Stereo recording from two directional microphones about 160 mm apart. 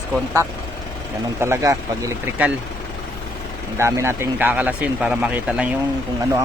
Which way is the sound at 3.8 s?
15° right (ahead or behind).